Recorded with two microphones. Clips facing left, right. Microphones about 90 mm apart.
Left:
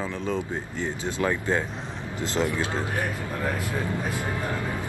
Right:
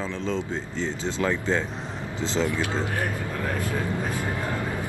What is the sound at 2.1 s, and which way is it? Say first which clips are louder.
Speech: even; 20° right (ahead or behind).